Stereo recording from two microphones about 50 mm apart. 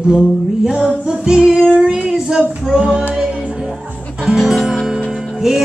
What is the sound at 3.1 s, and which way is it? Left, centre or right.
Music, right.